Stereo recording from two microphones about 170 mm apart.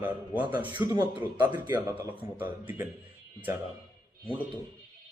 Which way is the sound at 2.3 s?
10° right (ahead or behind).